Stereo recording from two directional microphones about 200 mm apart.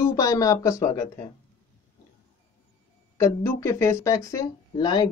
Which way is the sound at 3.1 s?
15° left (ahead or behind).